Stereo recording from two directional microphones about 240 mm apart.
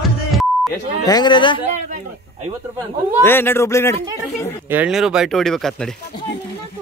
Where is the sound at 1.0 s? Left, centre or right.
Centre.